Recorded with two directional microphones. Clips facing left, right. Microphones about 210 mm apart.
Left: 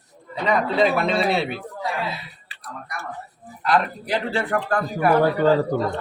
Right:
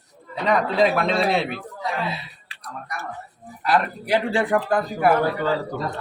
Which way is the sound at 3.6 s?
10° right (ahead or behind).